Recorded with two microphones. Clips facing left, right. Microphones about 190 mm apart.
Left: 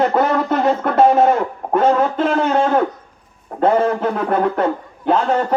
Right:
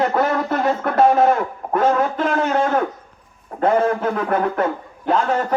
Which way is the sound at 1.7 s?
30° left (ahead or behind).